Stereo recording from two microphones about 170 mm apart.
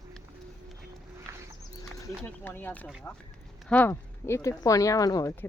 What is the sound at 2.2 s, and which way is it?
Speech, 10° left (ahead or behind).